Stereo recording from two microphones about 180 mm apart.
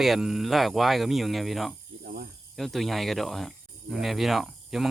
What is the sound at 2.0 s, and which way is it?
Snake, 60° right (ahead or behind).